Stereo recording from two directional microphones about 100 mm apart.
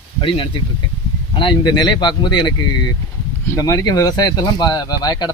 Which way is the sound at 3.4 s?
35° left (ahead or behind).